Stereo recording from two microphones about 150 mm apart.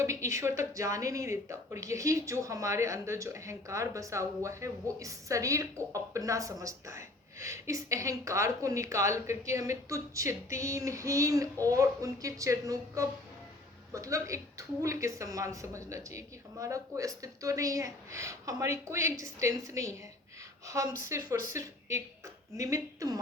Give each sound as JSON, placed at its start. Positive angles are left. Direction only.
{"t": 0.0, "sound": "speech", "side_deg": -20}